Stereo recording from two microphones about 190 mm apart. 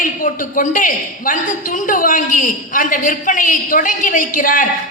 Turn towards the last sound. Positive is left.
turn(degrees=45)  # may be behind; listen again after turning